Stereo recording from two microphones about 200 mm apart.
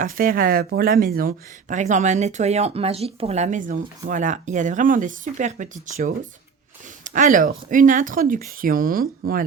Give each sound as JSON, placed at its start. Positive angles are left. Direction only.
{"t": 0.0, "sound": "speech", "side_deg": -45}